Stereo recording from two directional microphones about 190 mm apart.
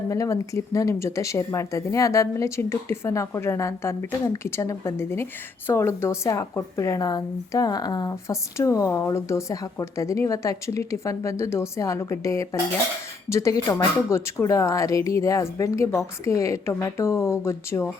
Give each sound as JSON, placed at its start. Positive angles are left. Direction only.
{"t": 0.1, "sound": "speech", "side_deg": 15}